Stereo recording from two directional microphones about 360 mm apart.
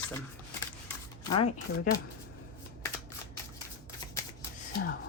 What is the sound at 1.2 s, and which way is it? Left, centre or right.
Speech, centre.